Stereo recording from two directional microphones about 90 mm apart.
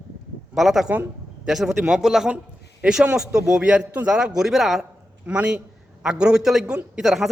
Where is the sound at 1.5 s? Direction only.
5° right (ahead or behind).